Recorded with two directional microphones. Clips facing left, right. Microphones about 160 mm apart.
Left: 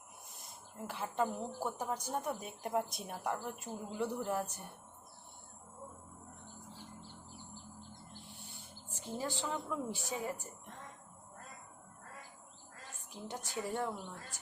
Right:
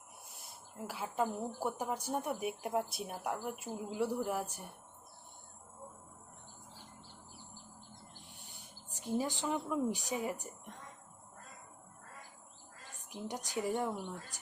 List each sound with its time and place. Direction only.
0.9 s speech: 5° right (ahead or behind)
8.3 s speech: 15° right (ahead or behind)
13.1 s speech: 15° right (ahead or behind)